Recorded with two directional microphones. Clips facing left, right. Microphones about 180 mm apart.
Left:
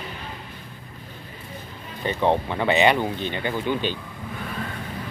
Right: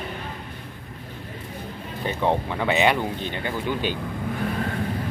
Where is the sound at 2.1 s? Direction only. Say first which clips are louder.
Left 2 dB; 5° right (ahead or behind).